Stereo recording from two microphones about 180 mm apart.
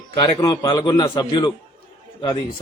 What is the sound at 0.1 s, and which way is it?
A man's voice, 20° left (ahead or behind).